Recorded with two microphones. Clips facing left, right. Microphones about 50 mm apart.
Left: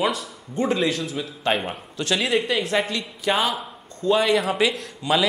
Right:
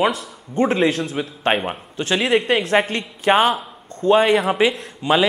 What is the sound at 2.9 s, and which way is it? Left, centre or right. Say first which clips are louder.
A man's voice: right 6 dB; right.